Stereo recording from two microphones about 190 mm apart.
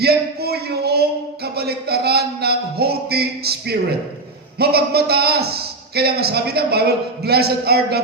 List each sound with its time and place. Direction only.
0.0 s a man's voice: 55° right (ahead or behind)